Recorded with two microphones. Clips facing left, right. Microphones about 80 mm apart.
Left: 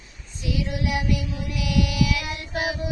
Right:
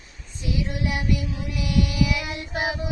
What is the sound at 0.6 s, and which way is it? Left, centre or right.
Child singing, right.